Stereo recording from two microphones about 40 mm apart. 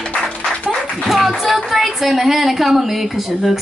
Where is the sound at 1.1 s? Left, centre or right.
Centre.